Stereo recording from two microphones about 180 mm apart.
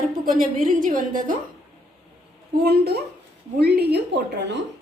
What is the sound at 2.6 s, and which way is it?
A woman's voice, 60° right (ahead or behind).